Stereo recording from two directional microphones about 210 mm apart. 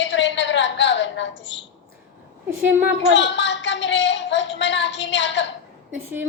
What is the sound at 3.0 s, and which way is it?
A woman's voice, 60° left (ahead or behind).